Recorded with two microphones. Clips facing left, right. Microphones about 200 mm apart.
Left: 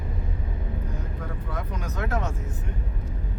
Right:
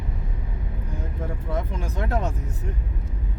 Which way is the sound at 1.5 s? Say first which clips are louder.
Right 4 dB; 30° right (ahead or behind).